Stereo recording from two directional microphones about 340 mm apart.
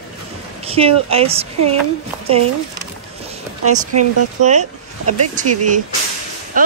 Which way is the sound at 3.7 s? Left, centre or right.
Right.